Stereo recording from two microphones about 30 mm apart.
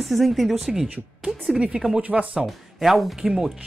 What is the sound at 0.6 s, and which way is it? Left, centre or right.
Speech, centre.